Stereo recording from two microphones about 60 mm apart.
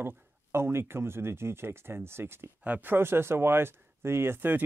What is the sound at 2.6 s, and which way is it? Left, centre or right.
Speech, right.